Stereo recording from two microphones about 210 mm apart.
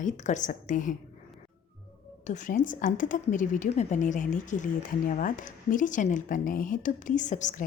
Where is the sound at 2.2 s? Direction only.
35° left (ahead or behind).